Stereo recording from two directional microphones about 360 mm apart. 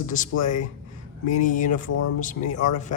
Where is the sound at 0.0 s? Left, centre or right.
Left.